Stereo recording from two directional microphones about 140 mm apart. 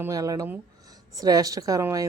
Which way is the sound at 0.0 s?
25° right (ahead or behind).